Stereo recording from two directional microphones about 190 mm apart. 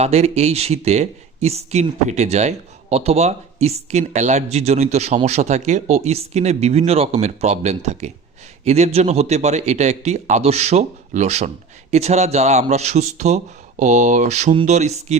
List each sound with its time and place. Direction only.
0.0 s speech: 35° right (ahead or behind)